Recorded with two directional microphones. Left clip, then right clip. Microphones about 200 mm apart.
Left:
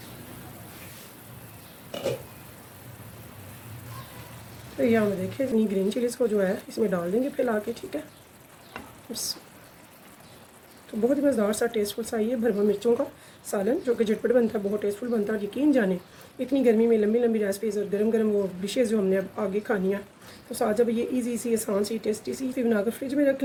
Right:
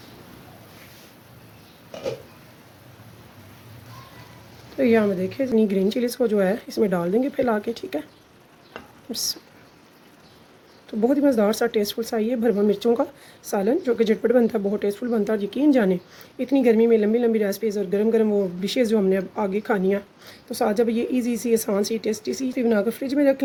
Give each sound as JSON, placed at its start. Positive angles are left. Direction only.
{"t": 4.8, "sound": "speech", "side_deg": -45}
{"t": 11.1, "sound": "speech", "side_deg": -45}